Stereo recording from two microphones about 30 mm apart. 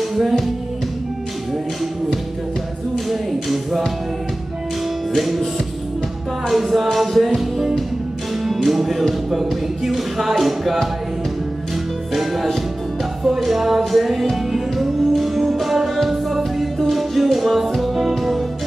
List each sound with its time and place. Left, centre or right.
0.1 s music: centre
3.1 s music: centre
5.1 s music: centre
6.5 s music: centre
12.2 s music: centre